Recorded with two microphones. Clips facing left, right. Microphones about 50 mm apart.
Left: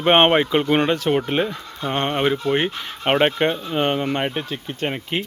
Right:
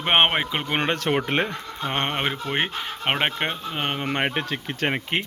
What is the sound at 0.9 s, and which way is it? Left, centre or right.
Speech, right.